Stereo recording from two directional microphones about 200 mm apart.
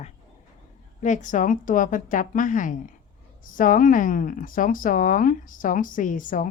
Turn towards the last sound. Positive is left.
turn(degrees=40)  # may be behind; listen again after turning